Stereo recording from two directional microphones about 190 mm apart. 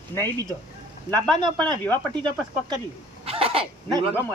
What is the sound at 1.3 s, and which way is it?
Speech, 25° right (ahead or behind).